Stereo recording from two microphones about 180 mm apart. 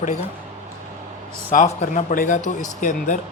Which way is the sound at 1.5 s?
40° left (ahead or behind).